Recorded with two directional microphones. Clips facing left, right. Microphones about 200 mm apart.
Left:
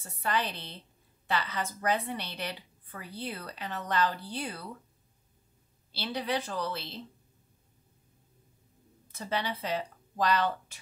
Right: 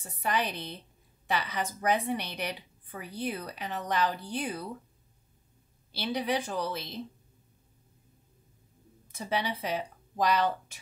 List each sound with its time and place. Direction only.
0.0 s a woman's voice: 15° right (ahead or behind)
5.9 s a woman's voice: 15° right (ahead or behind)
9.1 s speech: 10° right (ahead or behind)